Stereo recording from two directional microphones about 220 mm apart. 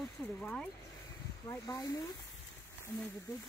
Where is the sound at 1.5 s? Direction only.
15° left (ahead or behind).